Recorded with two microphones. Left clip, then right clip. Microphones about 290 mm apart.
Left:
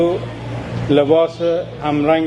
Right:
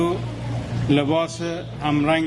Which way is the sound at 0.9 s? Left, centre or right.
Right.